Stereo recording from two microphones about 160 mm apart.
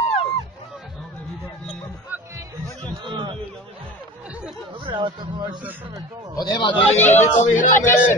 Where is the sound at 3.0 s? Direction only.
30° right (ahead or behind).